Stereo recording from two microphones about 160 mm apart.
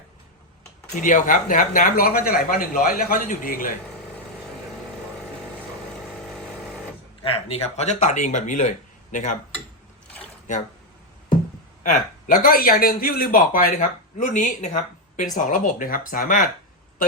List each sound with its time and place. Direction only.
0.9 s speech: 55° left (ahead or behind)
7.2 s speech: 40° left (ahead or behind)
11.8 s speech: 55° left (ahead or behind)